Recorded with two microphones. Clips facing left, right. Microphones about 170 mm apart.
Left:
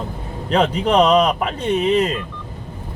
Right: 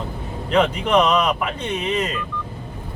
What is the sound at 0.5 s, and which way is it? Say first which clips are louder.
Speech: left 1 dB; 35° left (ahead or behind).